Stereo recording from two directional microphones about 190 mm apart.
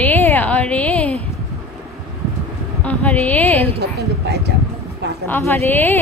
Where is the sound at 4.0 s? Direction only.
55° right (ahead or behind).